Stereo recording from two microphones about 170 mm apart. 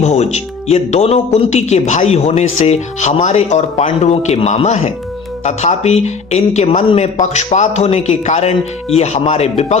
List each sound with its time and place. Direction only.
0.0 s speech: 40° left (ahead or behind)